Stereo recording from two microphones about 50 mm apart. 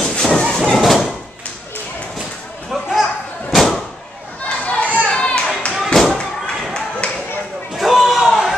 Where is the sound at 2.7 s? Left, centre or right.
Centre.